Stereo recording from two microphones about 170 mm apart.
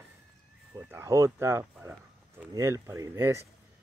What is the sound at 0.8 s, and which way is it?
Speech, 15° right (ahead or behind).